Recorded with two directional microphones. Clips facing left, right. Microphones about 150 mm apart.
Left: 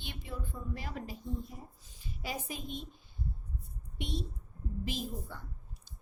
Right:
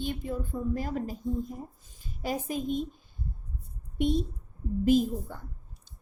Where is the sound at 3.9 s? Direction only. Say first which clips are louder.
Right 12 dB; 50° right (ahead or behind).